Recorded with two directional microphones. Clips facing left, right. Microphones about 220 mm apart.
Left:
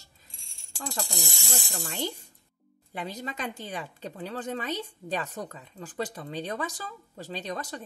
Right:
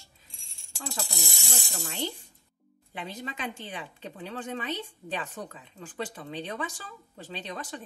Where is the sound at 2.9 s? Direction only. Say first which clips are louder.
Left 2 dB; 40° left (ahead or behind).